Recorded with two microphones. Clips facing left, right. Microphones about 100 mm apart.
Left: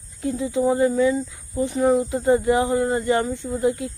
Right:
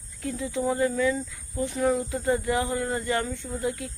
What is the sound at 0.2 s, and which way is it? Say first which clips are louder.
Speech: left 7 dB; 20° left (ahead or behind).